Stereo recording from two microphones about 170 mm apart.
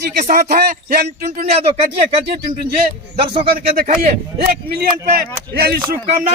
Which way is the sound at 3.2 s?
35° right (ahead or behind).